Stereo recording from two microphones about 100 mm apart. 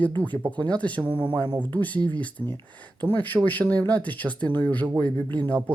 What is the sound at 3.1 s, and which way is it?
Speech, 20° left (ahead or behind).